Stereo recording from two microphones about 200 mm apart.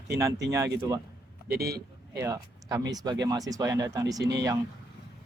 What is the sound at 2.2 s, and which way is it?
Speech, 15° right (ahead or behind).